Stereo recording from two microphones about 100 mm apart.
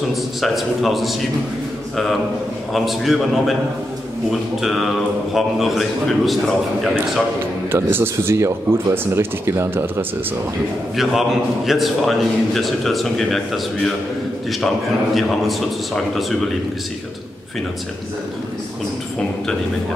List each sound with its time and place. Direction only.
0.1 s a man's voice: centre (ahead or behind)
2.7 s a man's voice: centre (ahead or behind)
7.7 s speech: 25° right (ahead or behind)
11.0 s a man's voice: centre (ahead or behind)
16.2 s a man's voice: centre (ahead or behind)